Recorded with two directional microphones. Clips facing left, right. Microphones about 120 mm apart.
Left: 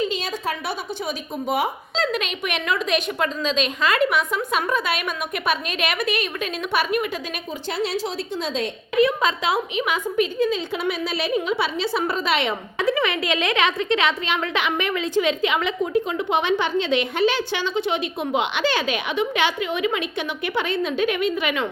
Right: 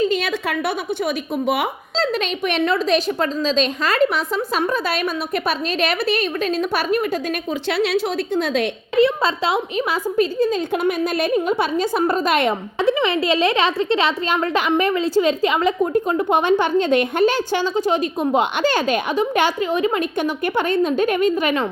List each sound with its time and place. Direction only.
0.2 s a woman's voice: 65° right (ahead or behind)
2.0 s a woman's voice: 35° right (ahead or behind)
7.7 s a woman's voice: 70° right (ahead or behind)
9.0 s a woman's voice: 30° right (ahead or behind)
10.7 s a woman's voice: 50° right (ahead or behind)
12.8 s a woman's voice: 30° right (ahead or behind)